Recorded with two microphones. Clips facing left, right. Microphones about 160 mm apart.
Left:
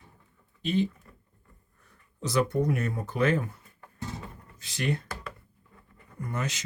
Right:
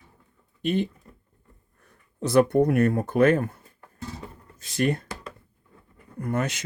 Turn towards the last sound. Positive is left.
turn(degrees=-55)  # may be behind; listen again after turning